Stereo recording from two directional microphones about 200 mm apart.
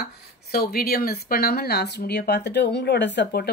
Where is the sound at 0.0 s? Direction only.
50° left (ahead or behind).